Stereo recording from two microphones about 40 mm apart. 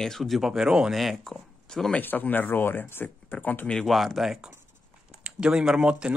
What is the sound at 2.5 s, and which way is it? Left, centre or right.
Speech, left.